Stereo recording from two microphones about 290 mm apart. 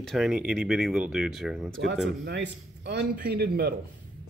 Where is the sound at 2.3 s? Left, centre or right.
Right.